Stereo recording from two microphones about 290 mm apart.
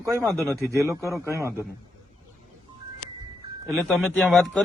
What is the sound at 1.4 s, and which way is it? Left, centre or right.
Speech, centre.